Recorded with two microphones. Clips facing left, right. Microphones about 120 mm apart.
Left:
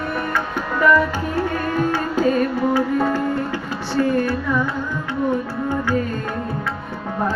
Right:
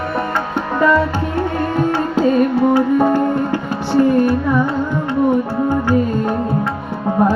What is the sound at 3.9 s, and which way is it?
Music, 20° right (ahead or behind).